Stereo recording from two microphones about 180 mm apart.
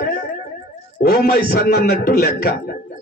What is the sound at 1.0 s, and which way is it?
A man's voice, 60° left (ahead or behind).